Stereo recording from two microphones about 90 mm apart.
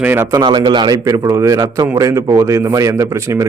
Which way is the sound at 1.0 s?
40° right (ahead or behind).